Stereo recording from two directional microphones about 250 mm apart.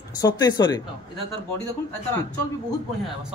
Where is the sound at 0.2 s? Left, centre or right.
Centre.